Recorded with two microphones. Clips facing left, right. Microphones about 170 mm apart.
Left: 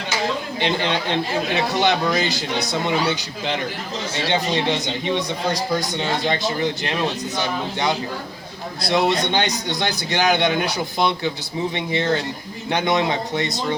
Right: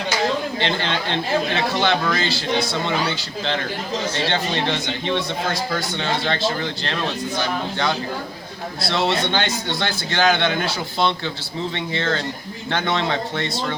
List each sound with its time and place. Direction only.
0.6 s speech: 15° left (ahead or behind)
4.3 s speech: 15° left (ahead or behind)
8.8 s speech: 15° left (ahead or behind)